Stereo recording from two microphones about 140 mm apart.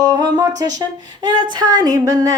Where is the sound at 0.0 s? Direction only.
25° right (ahead or behind).